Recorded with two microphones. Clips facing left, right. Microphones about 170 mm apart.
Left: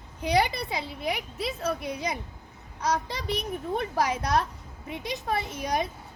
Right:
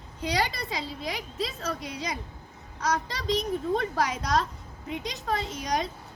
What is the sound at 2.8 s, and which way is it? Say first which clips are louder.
A woman's voice: left 1 dB; 10° left (ahead or behind).